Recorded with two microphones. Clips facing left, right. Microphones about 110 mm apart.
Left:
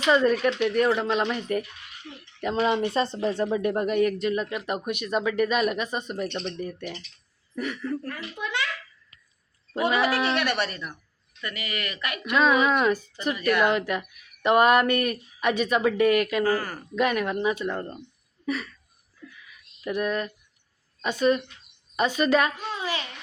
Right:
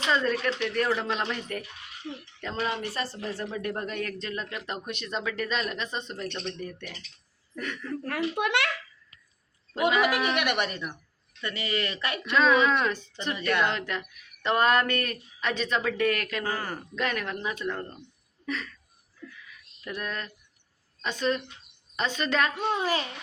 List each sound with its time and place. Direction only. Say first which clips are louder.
0.1 s a man's voice: left 6 dB; 15° left (ahead or behind)
8.0 s a child's voice: right 6 dB; 65° right (ahead or behind)
10.0 s speech: left 1 dB; 15° right (ahead or behind)
11.3 s speech: right 3 dB; 30° right (ahead or behind)
12.3 s speech: left 1 dB; 10° left (ahead or behind)
16.5 s speech: left 6 dB; 25° right (ahead or behind)
16.9 s speech: left 8 dB; 10° left (ahead or behind)
19.2 s a sound: right 1 dB; 10° left (ahead or behind)
21.0 s speech: left 5 dB; 10° left (ahead or behind)
22.5 s a child's voice: right 5 dB; 65° right (ahead or behind)
22.8 s speech: even; 45° right (ahead or behind)